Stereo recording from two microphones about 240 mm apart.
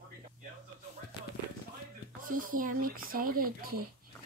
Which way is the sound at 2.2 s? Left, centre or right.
Right.